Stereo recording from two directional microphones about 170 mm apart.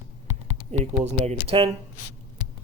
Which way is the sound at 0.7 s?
40° right (ahead or behind).